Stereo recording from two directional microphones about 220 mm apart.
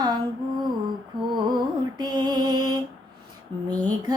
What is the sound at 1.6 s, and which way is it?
Mantra, 20° right (ahead or behind).